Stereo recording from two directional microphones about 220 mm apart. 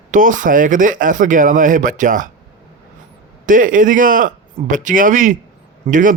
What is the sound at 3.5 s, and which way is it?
A man's voice, 35° right (ahead or behind).